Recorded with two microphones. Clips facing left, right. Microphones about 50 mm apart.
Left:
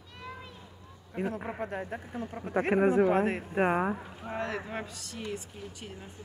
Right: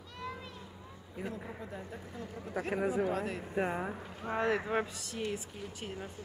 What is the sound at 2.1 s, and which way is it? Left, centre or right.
Speech, left.